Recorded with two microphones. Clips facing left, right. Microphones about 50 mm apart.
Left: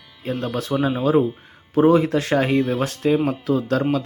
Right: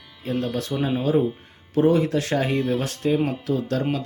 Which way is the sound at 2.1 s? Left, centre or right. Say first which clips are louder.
Left 3 dB; left.